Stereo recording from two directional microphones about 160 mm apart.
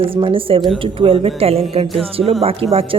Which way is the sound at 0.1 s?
35° right (ahead or behind).